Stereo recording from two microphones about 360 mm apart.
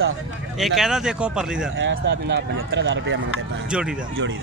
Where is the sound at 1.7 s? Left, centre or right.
Right.